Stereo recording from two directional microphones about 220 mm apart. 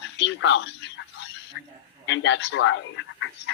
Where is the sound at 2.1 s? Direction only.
55° left (ahead or behind).